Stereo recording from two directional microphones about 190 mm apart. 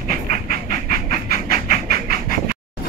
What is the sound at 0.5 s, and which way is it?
Train, 50° right (ahead or behind).